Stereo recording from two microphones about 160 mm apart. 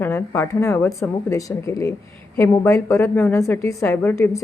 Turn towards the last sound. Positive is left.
turn(degrees=15)  # may be behind; listen again after turning